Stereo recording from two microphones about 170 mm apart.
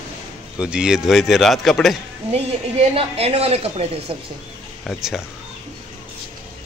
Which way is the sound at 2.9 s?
35° right (ahead or behind).